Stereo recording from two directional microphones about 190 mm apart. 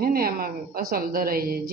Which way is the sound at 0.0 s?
50° right (ahead or behind).